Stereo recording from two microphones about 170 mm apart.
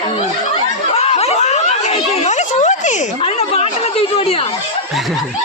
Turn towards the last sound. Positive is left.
turn(degrees=40)  # may be behind; listen again after turning